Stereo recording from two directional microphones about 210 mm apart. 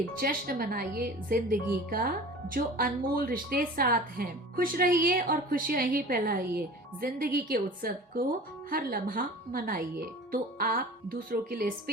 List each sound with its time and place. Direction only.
0.2 s speech: 45° right (ahead or behind)